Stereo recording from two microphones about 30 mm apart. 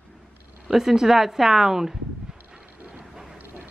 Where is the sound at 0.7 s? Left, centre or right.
Centre.